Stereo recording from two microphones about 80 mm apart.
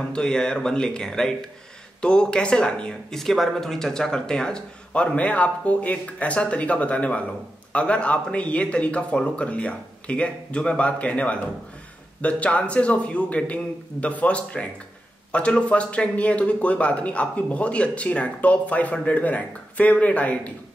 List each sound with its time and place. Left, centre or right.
0.1 s speech: centre